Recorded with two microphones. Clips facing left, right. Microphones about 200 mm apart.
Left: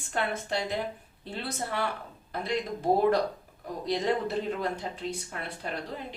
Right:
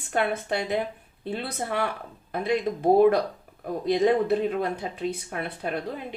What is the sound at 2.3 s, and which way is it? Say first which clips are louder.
Speech: right 6 dB; 55° right (ahead or behind).